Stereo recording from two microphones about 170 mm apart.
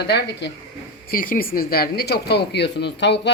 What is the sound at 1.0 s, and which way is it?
Speech, 55° left (ahead or behind).